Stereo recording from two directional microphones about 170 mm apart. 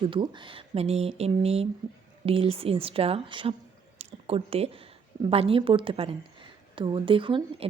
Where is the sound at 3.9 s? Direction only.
35° right (ahead or behind).